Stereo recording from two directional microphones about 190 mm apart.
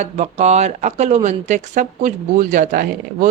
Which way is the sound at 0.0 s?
35° right (ahead or behind).